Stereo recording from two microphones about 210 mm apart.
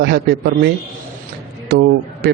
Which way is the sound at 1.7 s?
50° right (ahead or behind).